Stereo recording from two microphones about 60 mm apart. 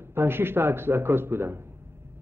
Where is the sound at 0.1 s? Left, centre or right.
Right.